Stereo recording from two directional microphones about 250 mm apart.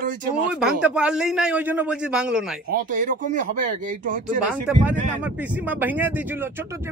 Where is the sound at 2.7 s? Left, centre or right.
Right.